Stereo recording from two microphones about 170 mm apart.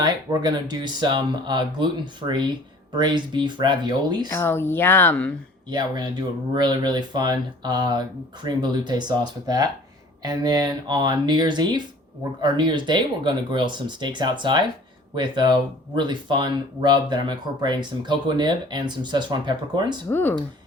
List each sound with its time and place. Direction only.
0.0 s speech: 25° right (ahead or behind)
4.3 s speech: 15° left (ahead or behind)
5.6 s speech: 25° right (ahead or behind)
20.1 s speech: 10° left (ahead or behind)